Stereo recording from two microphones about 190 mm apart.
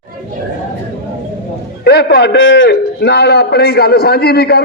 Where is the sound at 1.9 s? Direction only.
60° left (ahead or behind).